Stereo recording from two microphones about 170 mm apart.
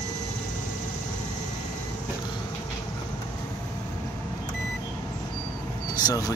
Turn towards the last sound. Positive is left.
turn(degrees=20)  # may be behind; listen again after turning